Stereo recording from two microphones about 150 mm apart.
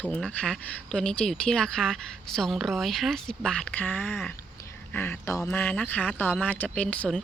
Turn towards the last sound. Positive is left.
turn(degrees=5)  # may be behind; listen again after turning